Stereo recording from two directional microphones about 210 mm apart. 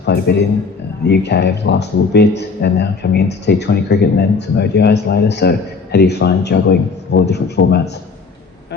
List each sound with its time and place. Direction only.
0.0 s a man's voice: 50° left (ahead or behind)